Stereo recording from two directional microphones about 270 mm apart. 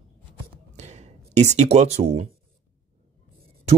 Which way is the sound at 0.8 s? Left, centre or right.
Right.